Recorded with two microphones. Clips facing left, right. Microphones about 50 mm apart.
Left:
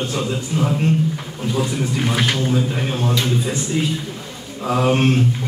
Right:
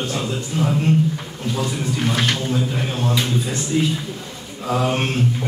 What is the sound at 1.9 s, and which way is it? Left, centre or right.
Speech, centre.